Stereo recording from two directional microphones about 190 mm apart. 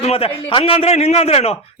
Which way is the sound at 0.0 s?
30° left (ahead or behind).